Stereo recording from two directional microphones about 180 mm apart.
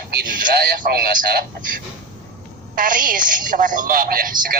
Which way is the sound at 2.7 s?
50° right (ahead or behind).